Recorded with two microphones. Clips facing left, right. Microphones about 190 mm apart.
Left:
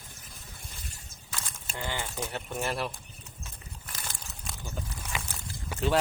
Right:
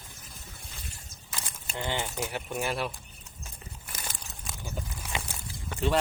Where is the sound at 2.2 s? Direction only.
10° right (ahead or behind).